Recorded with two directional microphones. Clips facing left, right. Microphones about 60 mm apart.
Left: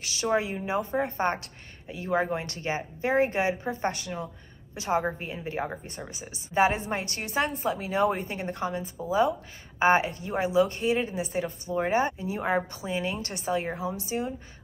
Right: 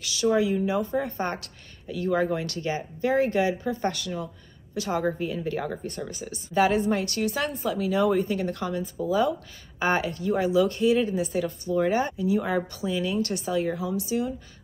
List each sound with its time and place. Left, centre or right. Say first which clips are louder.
0.0 s speech: right 4 dB; left